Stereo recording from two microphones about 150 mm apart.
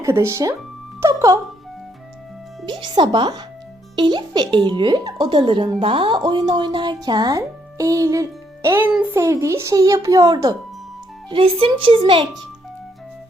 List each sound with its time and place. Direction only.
0.0 s speech: 20° right (ahead or behind)
2.6 s speech: 35° right (ahead or behind)
11.3 s speech: 40° right (ahead or behind)